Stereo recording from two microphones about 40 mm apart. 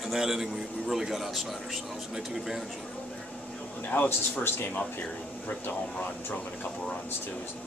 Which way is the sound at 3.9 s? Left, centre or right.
Left.